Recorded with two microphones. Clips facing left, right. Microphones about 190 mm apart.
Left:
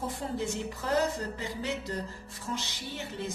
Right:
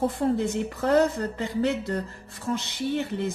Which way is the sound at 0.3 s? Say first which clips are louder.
Right 6 dB; 60° right (ahead or behind).